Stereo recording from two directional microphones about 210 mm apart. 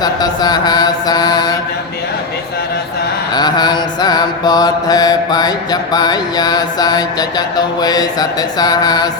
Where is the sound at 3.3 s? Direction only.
20° left (ahead or behind).